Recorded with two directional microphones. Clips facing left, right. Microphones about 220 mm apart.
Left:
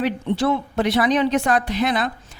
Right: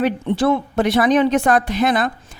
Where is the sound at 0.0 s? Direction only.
50° right (ahead or behind).